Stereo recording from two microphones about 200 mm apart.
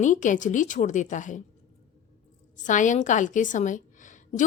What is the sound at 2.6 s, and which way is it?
A woman's voice, 40° left (ahead or behind).